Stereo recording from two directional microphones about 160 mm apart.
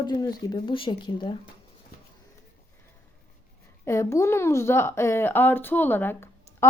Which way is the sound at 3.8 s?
15° left (ahead or behind).